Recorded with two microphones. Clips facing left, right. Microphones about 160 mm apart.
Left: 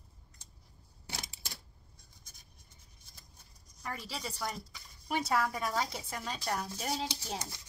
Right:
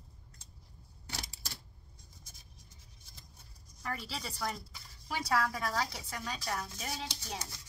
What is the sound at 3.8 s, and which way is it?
A woman's voice, 15° left (ahead or behind).